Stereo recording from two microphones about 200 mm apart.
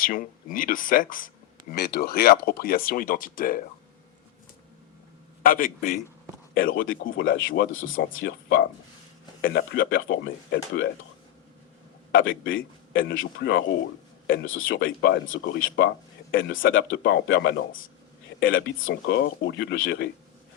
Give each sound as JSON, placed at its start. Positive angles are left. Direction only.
{"t": 0.0, "sound": "speech", "side_deg": 45}
{"t": 5.4, "sound": "a man's voice", "side_deg": 45}
{"t": 7.0, "sound": "speech", "side_deg": 70}
{"t": 10.5, "sound": "speech", "side_deg": 60}
{"t": 12.1, "sound": "speech", "side_deg": 70}
{"t": 19.1, "sound": "speech", "side_deg": 60}